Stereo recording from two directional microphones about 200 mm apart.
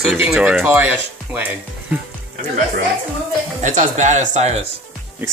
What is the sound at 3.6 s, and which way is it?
Speech, 35° right (ahead or behind).